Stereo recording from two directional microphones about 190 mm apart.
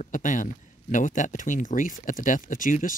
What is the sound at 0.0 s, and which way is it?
Speech, 40° left (ahead or behind).